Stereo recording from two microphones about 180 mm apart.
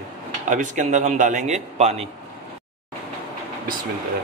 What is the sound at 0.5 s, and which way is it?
A man's voice, 45° right (ahead or behind).